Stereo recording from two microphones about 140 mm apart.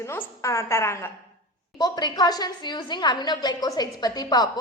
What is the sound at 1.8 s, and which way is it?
A woman's voice, 30° left (ahead or behind).